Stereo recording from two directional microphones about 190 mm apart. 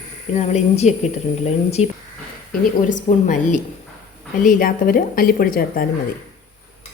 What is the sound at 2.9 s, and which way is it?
A woman's voice, 40° left (ahead or behind).